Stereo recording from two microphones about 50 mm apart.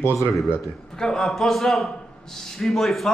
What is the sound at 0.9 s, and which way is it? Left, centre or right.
A man's voice, centre.